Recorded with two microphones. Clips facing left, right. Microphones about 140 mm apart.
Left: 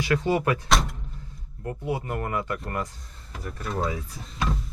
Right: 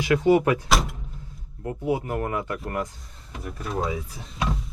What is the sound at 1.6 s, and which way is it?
Speech, 15° right (ahead or behind).